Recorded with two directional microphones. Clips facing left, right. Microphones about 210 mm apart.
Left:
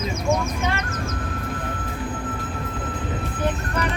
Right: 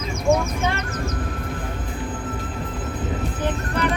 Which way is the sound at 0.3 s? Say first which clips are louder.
Right 4 dB; 30° right (ahead or behind).